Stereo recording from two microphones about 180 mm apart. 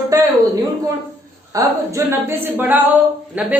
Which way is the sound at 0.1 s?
20° right (ahead or behind).